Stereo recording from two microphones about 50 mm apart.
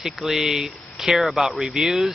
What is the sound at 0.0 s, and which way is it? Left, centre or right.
Speech, centre.